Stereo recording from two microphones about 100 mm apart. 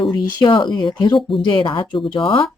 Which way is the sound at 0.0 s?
50° left (ahead or behind).